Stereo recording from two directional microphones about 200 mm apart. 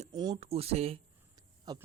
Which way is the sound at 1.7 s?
20° right (ahead or behind).